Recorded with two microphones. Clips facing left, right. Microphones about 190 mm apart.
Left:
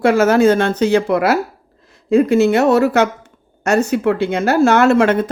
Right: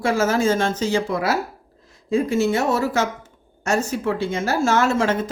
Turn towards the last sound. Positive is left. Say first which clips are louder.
# left 7 dB
turn(degrees=60)  # may be behind; listen again after turning